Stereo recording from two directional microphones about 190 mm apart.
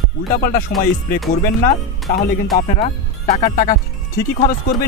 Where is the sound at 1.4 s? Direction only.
45° left (ahead or behind).